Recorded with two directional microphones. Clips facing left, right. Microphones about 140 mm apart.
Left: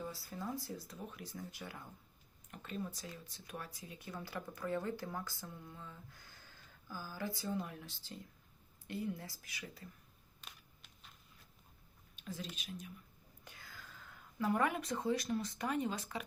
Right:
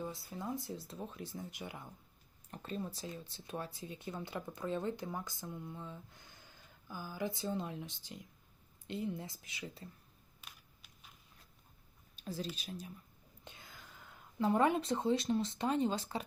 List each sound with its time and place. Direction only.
0.0 s speech: 20° right (ahead or behind)
2.5 s speech: 35° right (ahead or behind)
10.4 s a sound: 5° right (ahead or behind)
12.1 s a sound: 35° right (ahead or behind)
12.5 s speech: 35° right (ahead or behind)
13.4 s speech: 20° right (ahead or behind)